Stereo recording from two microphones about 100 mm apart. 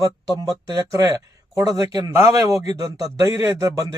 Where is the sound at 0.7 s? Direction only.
40° right (ahead or behind).